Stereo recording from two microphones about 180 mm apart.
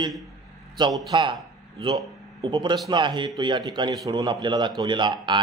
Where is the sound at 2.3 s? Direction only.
25° right (ahead or behind).